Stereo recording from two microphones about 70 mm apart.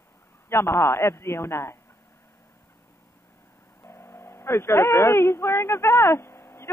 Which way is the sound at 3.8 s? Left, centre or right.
Left.